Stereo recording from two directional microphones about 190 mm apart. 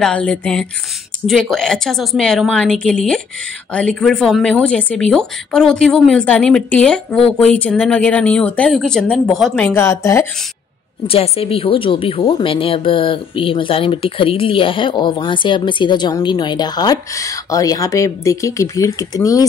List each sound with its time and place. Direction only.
0.0 s speech: 5° left (ahead or behind)
11.1 s speech: 30° left (ahead or behind)